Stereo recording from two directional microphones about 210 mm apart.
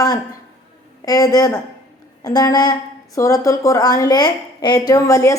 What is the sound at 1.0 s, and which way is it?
A woman's voice, 15° left (ahead or behind).